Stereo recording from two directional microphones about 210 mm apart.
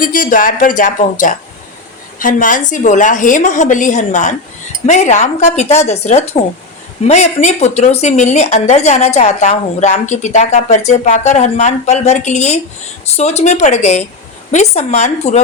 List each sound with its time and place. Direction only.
0.0 s speech: 40° left (ahead or behind)